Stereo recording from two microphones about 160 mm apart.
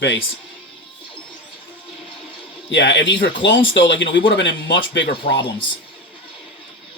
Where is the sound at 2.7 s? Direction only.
90° left.